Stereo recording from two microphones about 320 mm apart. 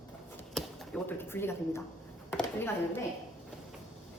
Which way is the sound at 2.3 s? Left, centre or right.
Centre.